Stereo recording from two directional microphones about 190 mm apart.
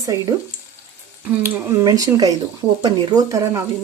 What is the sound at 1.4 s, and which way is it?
Speech, 15° right (ahead or behind).